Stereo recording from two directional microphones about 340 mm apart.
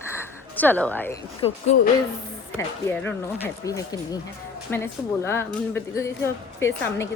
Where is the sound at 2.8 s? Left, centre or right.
Centre.